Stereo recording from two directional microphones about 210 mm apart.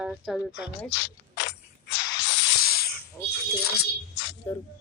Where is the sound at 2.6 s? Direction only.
45° left (ahead or behind).